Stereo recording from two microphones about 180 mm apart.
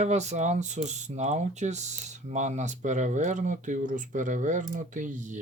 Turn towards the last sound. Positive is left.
turn(degrees=-45)  # may be behind; listen again after turning